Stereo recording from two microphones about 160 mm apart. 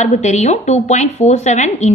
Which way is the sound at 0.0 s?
45° left (ahead or behind).